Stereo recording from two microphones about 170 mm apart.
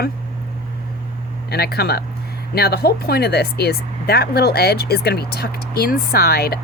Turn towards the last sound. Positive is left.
turn(degrees=65)  # may be behind; listen again after turning